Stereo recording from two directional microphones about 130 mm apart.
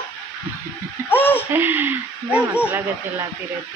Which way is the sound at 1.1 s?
15° left (ahead or behind).